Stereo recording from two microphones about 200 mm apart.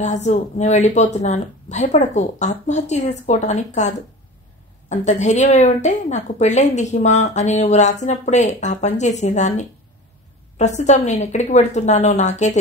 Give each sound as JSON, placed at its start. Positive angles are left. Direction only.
{"t": 0.0, "sound": "a woman's voice", "side_deg": 35}
{"t": 10.8, "sound": "a woman's voice", "side_deg": 35}